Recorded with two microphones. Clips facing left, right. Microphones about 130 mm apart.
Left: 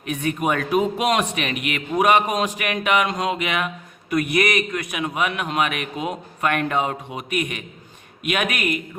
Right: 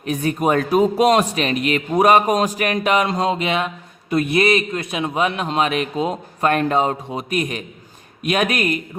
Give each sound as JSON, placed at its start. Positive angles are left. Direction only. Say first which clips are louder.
{"t": 0.0, "sound": "a man's voice", "louder": "right 4 dB", "side_deg": -35}